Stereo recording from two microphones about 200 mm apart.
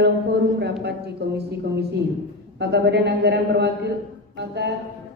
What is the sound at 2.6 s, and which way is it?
Speech, 55° right (ahead or behind).